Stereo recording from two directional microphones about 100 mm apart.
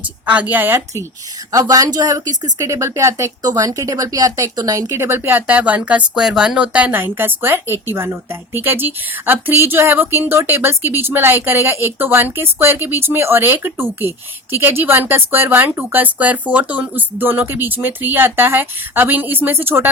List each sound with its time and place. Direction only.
0.0 s speech: 15° right (ahead or behind)
1.5 s speech: 40° right (ahead or behind); by 19.9 s 20° right (ahead or behind)